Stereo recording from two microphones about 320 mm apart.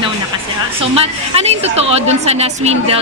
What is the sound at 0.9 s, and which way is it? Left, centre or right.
A woman's voice, centre.